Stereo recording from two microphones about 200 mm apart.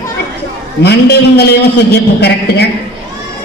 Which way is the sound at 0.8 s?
55° left (ahead or behind).